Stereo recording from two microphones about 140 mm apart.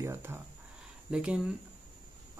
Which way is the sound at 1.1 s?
5° right (ahead or behind).